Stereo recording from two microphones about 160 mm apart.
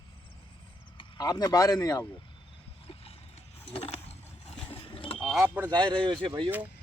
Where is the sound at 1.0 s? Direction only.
25° left (ahead or behind).